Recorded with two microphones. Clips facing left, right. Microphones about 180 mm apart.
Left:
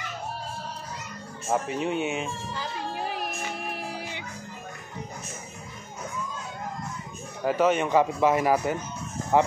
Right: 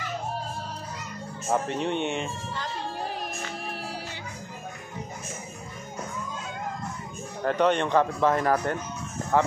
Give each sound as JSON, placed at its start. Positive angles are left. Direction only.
{"t": 1.5, "sound": "speech", "side_deg": 5}
{"t": 7.4, "sound": "speech", "side_deg": 5}